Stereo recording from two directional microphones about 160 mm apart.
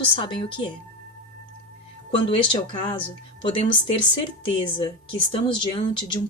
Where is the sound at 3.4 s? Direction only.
30° left (ahead or behind).